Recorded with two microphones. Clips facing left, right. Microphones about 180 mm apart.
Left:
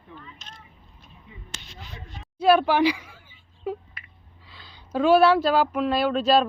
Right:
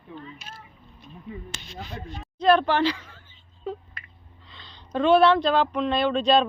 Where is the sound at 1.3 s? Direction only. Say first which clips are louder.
Right 7 dB; 45° right (ahead or behind).